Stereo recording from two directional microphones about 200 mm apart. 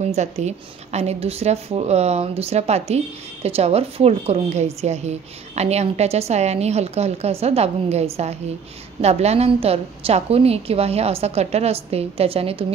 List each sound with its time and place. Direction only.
0.0 s a woman's voice: 35° right (ahead or behind)